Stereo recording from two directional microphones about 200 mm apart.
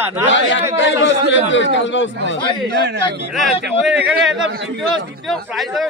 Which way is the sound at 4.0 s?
5° right (ahead or behind).